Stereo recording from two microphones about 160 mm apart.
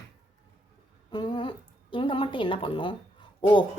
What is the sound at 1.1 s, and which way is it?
A woman's voice, 25° left (ahead or behind).